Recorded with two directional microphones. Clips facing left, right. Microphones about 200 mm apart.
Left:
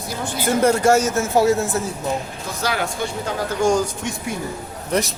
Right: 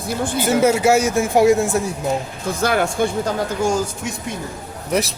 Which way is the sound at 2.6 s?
50° right (ahead or behind).